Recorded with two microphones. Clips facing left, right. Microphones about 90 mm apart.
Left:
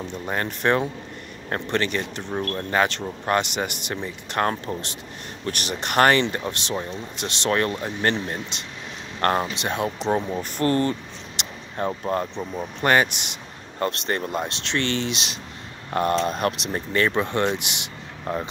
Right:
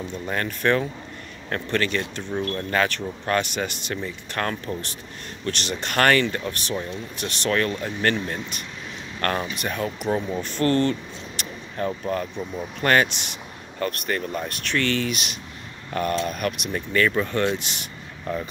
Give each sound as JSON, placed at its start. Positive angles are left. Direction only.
{"t": 0.1, "sound": "a man's voice", "side_deg": 20}
{"t": 5.5, "sound": "speech", "side_deg": 15}
{"t": 11.7, "sound": "speech", "side_deg": 30}
{"t": 12.9, "sound": "speech", "side_deg": 15}
{"t": 13.7, "sound": "speech", "side_deg": 30}
{"t": 18.3, "sound": "a man's voice", "side_deg": 35}